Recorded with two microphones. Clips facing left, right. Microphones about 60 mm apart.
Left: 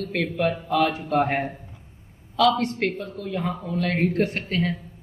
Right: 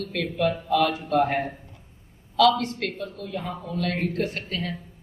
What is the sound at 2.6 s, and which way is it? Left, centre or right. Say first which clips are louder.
A woman's voice: left 4 dB; left.